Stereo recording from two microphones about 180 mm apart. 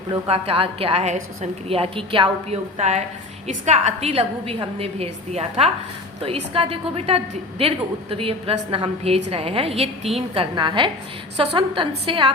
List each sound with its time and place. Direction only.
0.1 s a woman's voice: 30° right (ahead or behind)